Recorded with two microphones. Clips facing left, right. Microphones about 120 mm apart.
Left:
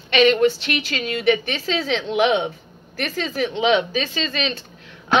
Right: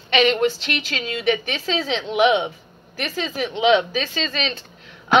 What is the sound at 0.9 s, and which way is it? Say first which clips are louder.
Speech: left 2 dB; 50° left (ahead or behind).